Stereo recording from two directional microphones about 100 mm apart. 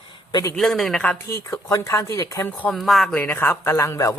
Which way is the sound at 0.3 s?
40° left (ahead or behind).